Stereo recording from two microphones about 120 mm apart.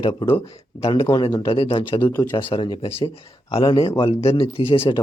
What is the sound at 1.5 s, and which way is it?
Speech, 50° left (ahead or behind).